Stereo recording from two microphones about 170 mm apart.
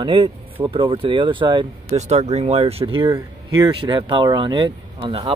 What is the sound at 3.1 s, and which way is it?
Speech, 20° right (ahead or behind).